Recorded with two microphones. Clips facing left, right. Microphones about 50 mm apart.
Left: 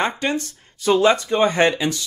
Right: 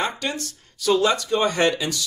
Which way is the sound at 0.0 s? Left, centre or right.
Left.